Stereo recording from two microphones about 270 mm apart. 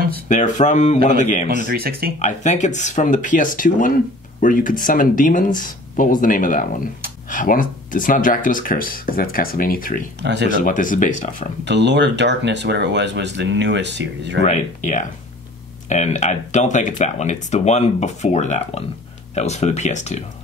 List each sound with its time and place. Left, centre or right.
0.3 s speech: left
1.7 s speech: right
2.1 s speech: left
10.2 s speech: right
10.5 s speech: left
11.6 s speech: right
14.4 s speech: left